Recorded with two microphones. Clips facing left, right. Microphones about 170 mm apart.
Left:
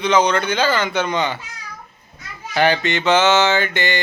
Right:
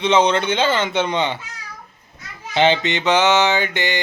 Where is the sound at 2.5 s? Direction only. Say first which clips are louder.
Right 1 dB; 20° right (ahead or behind).